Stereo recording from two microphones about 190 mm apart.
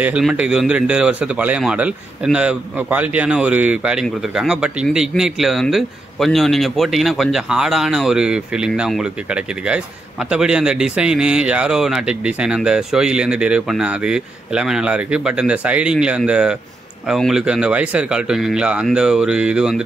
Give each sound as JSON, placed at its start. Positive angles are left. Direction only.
{"t": 0.0, "sound": "a man's voice", "side_deg": -5}